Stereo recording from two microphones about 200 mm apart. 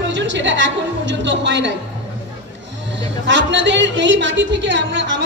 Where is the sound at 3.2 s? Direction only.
65° right (ahead or behind).